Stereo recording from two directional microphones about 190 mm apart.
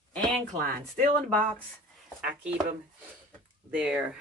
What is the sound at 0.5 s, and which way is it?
Speech, 40° right (ahead or behind).